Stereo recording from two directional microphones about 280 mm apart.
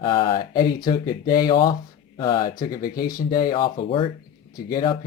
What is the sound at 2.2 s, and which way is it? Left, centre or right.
Speech, centre.